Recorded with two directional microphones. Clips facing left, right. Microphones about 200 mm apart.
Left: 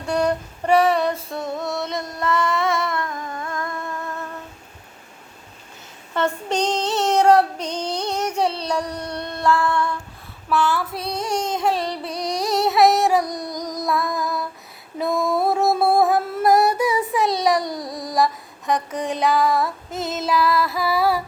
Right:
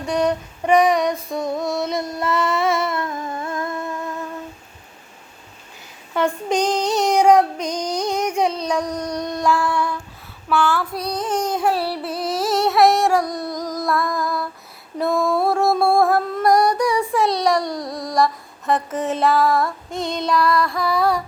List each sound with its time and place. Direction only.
0.1 s female singing: 10° right (ahead or behind)
1.0 s music: 5° left (ahead or behind)
2.1 s a sound: 20° right (ahead or behind)
6.1 s child singing: 10° right (ahead or behind)
11.4 s music: 5° right (ahead or behind)